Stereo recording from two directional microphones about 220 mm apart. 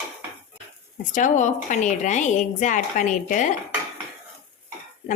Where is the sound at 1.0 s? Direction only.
35° left (ahead or behind).